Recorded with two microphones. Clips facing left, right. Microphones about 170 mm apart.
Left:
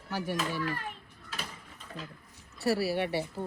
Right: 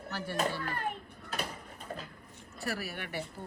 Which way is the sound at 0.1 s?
10° left (ahead or behind).